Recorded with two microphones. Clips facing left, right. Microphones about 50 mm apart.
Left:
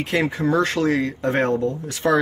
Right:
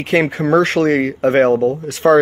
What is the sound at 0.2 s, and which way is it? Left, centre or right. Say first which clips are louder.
Speech: right 5 dB; right.